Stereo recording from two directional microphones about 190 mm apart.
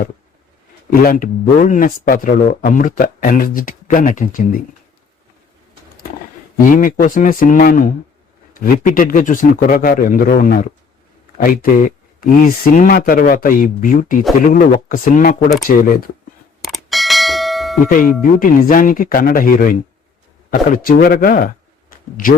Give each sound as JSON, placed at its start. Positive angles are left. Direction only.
{"t": 0.9, "sound": "speech", "side_deg": 45}
{"t": 6.7, "sound": "speech", "side_deg": 45}
{"t": 16.6, "sound": "bell", "side_deg": 0}
{"t": 17.8, "sound": "a man's voice", "side_deg": 45}